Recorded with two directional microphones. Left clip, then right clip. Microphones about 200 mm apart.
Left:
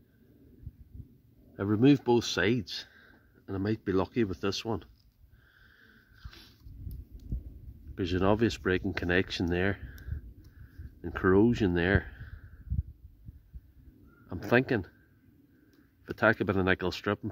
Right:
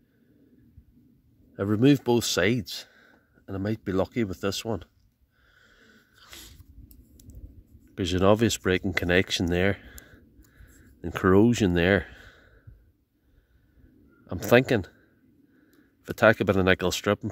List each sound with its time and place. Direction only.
1.5 s speech: 40° right (ahead or behind)
5.6 s wheeze: 55° right (ahead or behind)
7.9 s speech: 50° right (ahead or behind)
14.2 s speech: 50° right (ahead or behind)
16.1 s speech: 50° right (ahead or behind)